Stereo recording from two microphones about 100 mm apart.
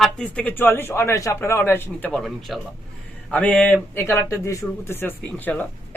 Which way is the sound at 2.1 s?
Centre (ahead or behind).